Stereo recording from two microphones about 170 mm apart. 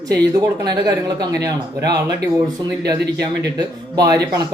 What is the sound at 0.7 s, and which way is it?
A man's voice, 25° right (ahead or behind).